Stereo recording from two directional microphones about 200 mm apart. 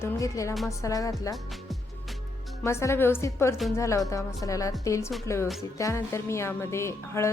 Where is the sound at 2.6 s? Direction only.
15° left (ahead or behind).